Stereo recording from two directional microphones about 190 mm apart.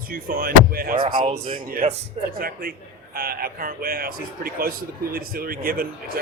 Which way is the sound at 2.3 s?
50° right (ahead or behind).